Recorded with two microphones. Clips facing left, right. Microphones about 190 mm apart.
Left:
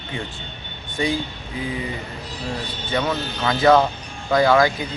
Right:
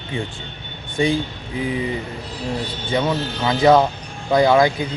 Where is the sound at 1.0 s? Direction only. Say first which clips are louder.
Right 4 dB; 20° right (ahead or behind).